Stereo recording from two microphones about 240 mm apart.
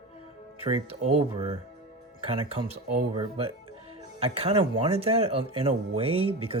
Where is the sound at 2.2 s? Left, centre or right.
Right.